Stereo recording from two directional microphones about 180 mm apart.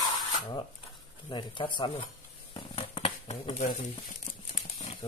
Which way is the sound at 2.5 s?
30° left (ahead or behind).